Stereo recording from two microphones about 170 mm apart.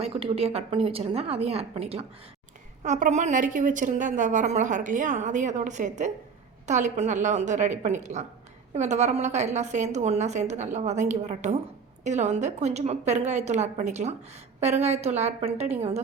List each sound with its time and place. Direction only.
0.0 s a woman's voice: 35° right (ahead or behind)